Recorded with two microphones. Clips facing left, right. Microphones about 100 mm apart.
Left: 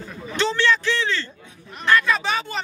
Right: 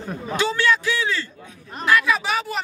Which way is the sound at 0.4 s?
10° right (ahead or behind).